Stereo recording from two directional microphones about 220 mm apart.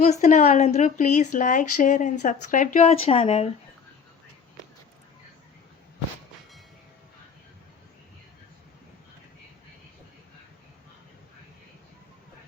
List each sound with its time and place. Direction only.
0.0 s a woman's voice: 35° left (ahead or behind)